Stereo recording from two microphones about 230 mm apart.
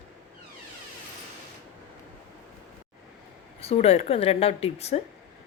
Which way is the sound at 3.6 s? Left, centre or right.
Left.